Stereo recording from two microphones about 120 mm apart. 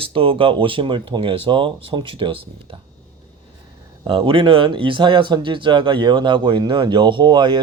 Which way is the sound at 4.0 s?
45° right (ahead or behind).